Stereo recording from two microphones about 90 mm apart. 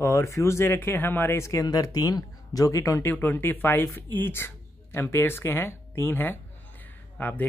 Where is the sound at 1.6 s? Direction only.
45° left (ahead or behind).